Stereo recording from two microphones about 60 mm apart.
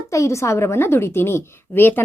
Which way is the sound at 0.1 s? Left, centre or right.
Left.